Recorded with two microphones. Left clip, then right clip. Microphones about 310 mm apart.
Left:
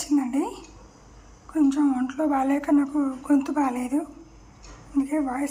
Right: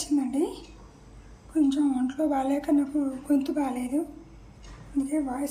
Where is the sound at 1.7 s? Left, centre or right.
Centre.